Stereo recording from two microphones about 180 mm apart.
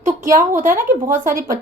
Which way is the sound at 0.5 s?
45° right (ahead or behind).